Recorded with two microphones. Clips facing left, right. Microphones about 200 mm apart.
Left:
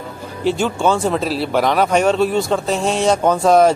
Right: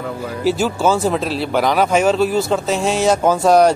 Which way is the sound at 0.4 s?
5° right (ahead or behind).